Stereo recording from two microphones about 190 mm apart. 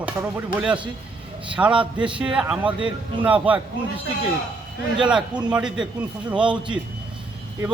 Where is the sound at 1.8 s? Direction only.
25° right (ahead or behind).